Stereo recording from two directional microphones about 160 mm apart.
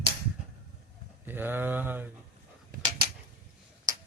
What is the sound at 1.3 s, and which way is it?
Speech, 10° right (ahead or behind).